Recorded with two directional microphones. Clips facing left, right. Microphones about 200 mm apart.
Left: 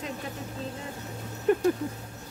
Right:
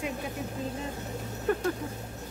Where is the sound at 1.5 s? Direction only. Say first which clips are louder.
Left 5 dB; 15° left (ahead or behind).